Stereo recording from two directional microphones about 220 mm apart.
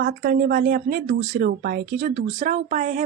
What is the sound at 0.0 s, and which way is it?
Speech, 40° right (ahead or behind).